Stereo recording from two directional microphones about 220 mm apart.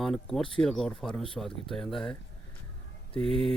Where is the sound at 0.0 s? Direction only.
Centre (ahead or behind).